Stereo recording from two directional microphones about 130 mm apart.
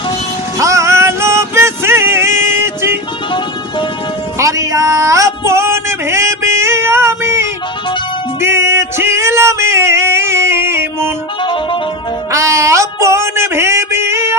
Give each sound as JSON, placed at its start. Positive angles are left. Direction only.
{"t": 0.6, "sound": "music", "side_deg": -25}
{"t": 4.4, "sound": "music", "side_deg": -25}
{"t": 8.4, "sound": "male singing", "side_deg": -20}
{"t": 11.4, "sound": "music", "side_deg": 40}
{"t": 12.3, "sound": "a sound", "side_deg": -25}